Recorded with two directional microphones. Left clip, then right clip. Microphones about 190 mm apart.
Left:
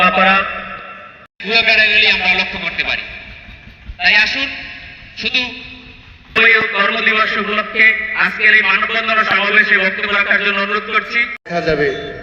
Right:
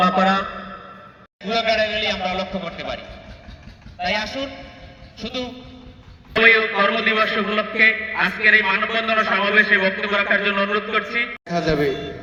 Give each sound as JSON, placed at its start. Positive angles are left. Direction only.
{"t": 0.2, "sound": "a sound", "side_deg": -35}
{"t": 1.4, "sound": "a man's voice", "side_deg": -35}
{"t": 11.4, "sound": "a man's voice", "side_deg": -65}
{"t": 11.9, "sound": "a man's voice", "side_deg": -45}